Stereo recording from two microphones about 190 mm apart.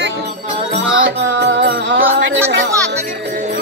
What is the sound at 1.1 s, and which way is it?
Music, 70° right (ahead or behind).